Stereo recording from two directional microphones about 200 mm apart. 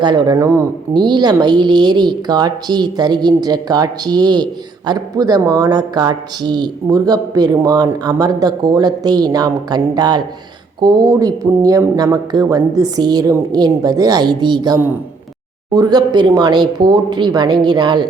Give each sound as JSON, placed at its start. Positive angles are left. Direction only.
{"t": 0.0, "sound": "speech", "side_deg": -20}